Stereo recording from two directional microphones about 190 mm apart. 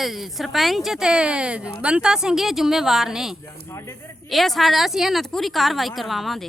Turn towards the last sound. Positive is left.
turn(degrees=0)  # may be behind; listen again after turning